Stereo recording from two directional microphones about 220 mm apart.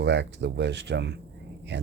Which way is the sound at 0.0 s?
50° right (ahead or behind).